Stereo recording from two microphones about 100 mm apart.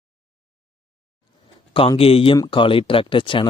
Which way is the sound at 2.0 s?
75° left (ahead or behind).